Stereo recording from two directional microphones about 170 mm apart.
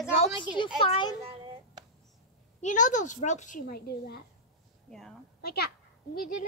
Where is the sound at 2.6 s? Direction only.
45° left (ahead or behind); by 4.2 s 65° left (ahead or behind).